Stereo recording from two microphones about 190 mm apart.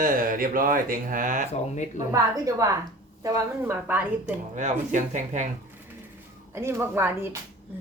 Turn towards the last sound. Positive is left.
turn(degrees=-15)  # may be behind; listen again after turning